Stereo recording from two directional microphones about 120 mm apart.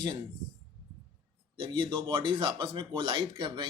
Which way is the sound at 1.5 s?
45° right (ahead or behind).